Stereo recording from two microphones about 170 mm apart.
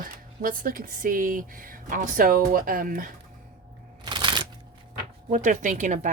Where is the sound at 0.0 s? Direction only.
55° right (ahead or behind).